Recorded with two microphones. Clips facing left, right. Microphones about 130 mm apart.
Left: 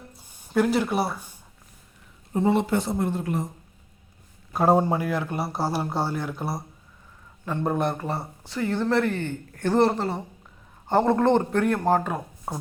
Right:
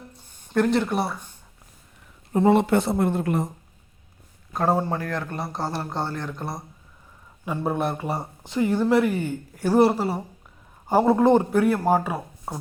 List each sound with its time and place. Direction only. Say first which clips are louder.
0.1 s a sound: even; 10° left (ahead or behind)
2.3 s speech: right 4 dB; 65° right (ahead or behind)
4.5 s a man's voice: left 3 dB; 15° left (ahead or behind)
7.4 s speech: even; 5° right (ahead or behind)